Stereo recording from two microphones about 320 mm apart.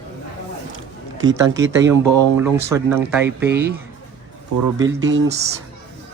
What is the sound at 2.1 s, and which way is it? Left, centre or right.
Speech, right.